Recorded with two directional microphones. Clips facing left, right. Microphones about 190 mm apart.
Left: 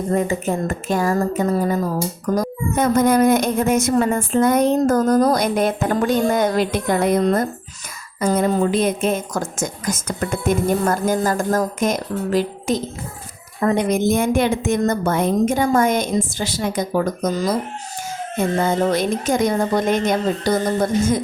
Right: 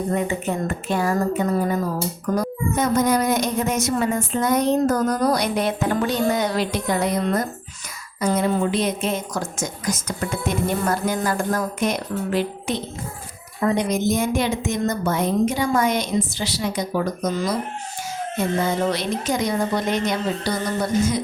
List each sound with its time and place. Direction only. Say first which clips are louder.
0.1 s a woman's voice: left 7 dB; 40° left (ahead or behind)
8.2 s a woman's voice: left 3 dB; 50° left (ahead or behind)
13.6 s a woman's voice: left 3 dB; 55° left (ahead or behind)